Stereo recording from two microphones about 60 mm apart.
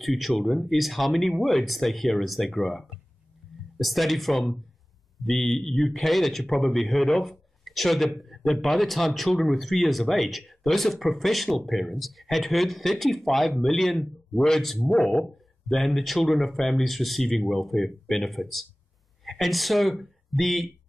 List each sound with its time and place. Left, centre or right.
0.0 s speech: centre